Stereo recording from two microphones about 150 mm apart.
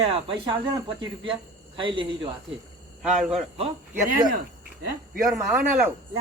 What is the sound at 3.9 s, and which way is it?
Speech, 70° right (ahead or behind).